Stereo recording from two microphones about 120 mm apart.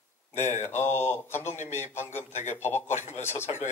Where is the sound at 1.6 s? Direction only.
75° left (ahead or behind).